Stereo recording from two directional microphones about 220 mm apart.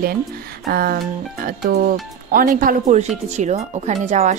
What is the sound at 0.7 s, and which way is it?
Speech, 45° right (ahead or behind).